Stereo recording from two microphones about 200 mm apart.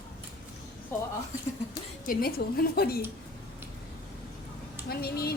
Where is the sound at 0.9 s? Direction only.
10° left (ahead or behind).